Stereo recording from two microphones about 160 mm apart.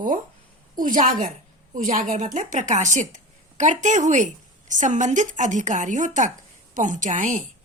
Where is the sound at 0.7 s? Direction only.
55° right (ahead or behind).